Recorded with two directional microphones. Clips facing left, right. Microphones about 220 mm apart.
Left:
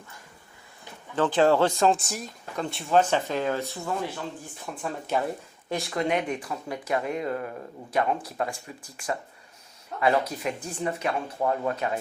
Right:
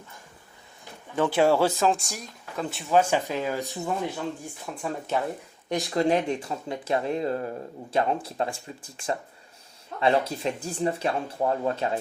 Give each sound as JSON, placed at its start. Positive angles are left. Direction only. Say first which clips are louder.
{"t": 1.1, "sound": "speech", "louder": "even", "side_deg": -10}
{"t": 4.7, "sound": "speech", "louder": "even", "side_deg": 0}
{"t": 5.6, "sound": "speech", "louder": "right 3 dB", "side_deg": -20}
{"t": 10.0, "sound": "speech", "louder": "right 1 dB", "side_deg": -25}